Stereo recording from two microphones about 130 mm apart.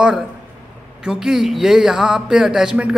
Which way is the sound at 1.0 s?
5° right (ahead or behind).